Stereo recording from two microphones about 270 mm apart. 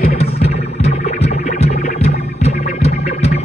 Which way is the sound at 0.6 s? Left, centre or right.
Left.